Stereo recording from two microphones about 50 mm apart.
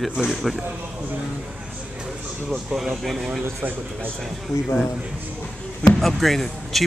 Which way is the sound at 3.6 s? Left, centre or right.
Right.